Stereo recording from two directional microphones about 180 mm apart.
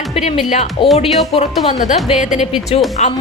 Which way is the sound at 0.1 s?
35° left (ahead or behind).